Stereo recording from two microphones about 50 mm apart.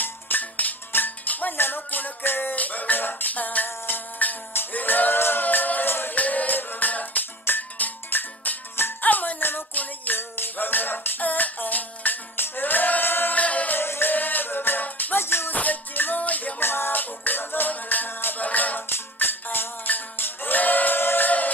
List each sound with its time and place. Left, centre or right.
0.0 s music: left
2.5 s music: left
4.7 s a sound: left
6.1 s music: left
9.0 s music: left
13.4 s music: left
13.7 s music: left
14.1 s music: left
15.1 s music: left
15.5 s music: left
16.5 s music: left
18.9 s music: left